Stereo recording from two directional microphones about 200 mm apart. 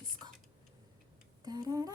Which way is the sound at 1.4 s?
20° right (ahead or behind).